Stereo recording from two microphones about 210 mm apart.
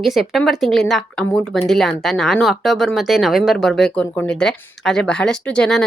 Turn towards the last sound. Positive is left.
turn(degrees=5)  # may be behind; listen again after turning